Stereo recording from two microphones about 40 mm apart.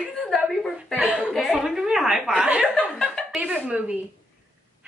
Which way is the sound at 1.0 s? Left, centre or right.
Right.